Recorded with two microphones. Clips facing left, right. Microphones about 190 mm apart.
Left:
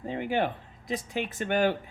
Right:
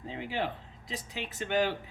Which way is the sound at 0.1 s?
55° left (ahead or behind).